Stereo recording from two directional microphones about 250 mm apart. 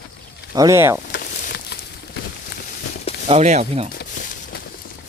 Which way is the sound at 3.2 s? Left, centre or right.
Right.